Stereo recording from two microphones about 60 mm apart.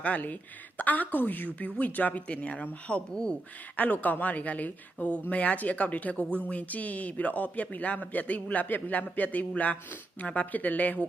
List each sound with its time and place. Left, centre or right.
0.0 s a woman's voice: left
3.8 s speech: left